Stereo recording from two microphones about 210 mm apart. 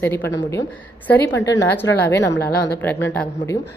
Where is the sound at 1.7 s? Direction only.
10° left (ahead or behind).